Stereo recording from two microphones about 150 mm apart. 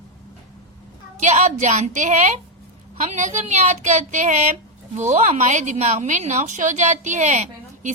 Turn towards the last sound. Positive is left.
turn(degrees=-55)  # may be behind; listen again after turning